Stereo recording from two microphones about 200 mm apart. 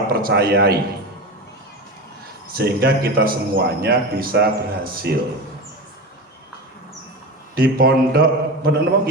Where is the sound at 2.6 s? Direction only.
50° right (ahead or behind).